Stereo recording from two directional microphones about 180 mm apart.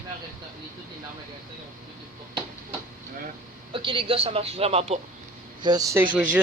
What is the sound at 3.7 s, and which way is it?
Speech, 30° right (ahead or behind).